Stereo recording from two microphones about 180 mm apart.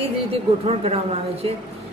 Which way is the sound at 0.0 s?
35° right (ahead or behind).